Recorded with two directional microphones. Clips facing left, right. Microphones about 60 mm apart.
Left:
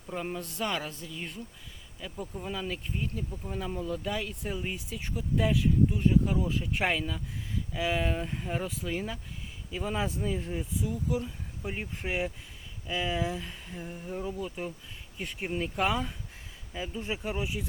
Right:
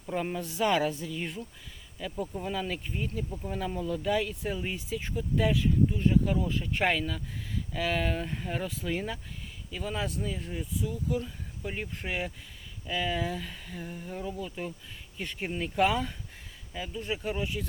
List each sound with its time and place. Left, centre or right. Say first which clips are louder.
0.0 s speech: right 3 dB; centre
9.7 s speech: left 1 dB; centre
17.0 s speech: right 2 dB; centre